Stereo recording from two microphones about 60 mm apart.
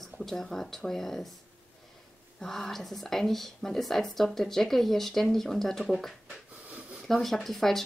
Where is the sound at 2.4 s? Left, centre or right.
Centre.